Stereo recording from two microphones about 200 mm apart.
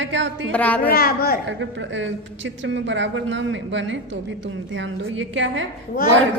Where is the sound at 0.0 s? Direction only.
65° right (ahead or behind).